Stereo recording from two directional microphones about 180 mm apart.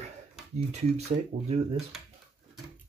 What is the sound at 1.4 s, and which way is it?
Speech, 35° right (ahead or behind).